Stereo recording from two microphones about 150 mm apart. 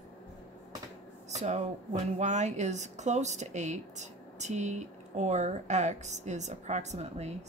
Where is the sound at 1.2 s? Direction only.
50° right (ahead or behind).